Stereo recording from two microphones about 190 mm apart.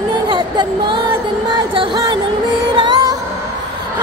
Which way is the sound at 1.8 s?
20° right (ahead or behind).